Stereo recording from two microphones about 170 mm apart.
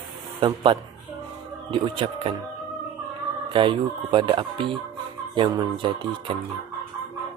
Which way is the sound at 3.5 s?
30° right (ahead or behind).